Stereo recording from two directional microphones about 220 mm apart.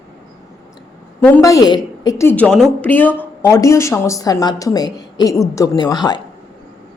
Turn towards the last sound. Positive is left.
turn(degrees=20)  # may be behind; listen again after turning